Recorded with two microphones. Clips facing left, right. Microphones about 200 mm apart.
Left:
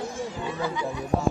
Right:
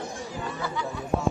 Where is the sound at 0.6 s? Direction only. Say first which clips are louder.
Left 3 dB; 15° left (ahead or behind).